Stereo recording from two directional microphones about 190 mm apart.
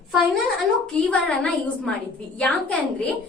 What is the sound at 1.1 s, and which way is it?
A woman's voice, 5° left (ahead or behind).